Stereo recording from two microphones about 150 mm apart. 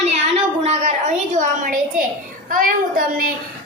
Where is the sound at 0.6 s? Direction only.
45° right (ahead or behind).